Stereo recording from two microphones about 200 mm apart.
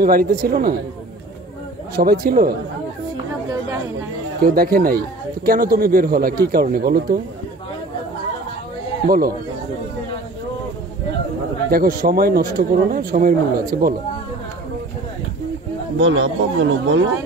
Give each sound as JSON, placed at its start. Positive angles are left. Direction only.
{"t": 0.0, "sound": "a man's voice", "side_deg": -45}
{"t": 2.0, "sound": "a man's voice", "side_deg": -50}
{"t": 4.4, "sound": "a man's voice", "side_deg": -45}
{"t": 9.0, "sound": "a man's voice", "side_deg": -45}
{"t": 11.7, "sound": "a man's voice", "side_deg": -50}
{"t": 16.0, "sound": "speech", "side_deg": -75}